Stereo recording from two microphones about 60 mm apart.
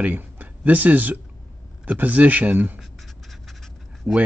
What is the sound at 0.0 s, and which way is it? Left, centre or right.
Speech, right.